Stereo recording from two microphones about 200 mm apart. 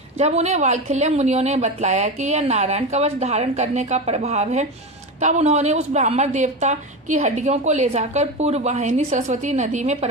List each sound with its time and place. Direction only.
0.2 s a woman's voice: 35° right (ahead or behind)